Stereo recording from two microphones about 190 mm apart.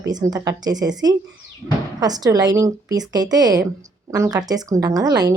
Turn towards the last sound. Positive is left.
turn(degrees=-20)  # may be behind; listen again after turning